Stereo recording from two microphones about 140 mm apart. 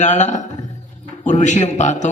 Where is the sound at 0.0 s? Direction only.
55° left (ahead or behind).